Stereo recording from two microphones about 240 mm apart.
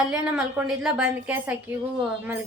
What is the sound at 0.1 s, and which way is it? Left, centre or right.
A woman's voice, centre.